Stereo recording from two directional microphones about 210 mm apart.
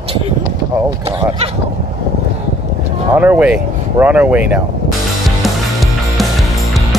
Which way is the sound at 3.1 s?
5° right (ahead or behind).